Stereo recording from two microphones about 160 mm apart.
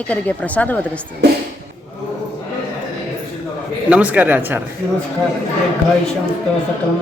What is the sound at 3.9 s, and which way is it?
Speech, 10° right (ahead or behind).